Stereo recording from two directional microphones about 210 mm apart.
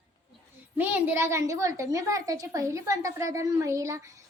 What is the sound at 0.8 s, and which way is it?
A child's voice, 10° right (ahead or behind).